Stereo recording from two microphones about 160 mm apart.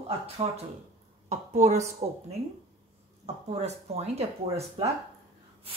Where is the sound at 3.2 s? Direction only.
45° right (ahead or behind).